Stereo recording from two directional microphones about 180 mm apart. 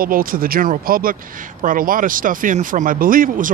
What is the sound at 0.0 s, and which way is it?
Speech, 50° right (ahead or behind).